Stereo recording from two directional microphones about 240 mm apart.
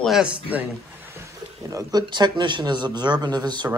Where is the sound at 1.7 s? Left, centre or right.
Centre.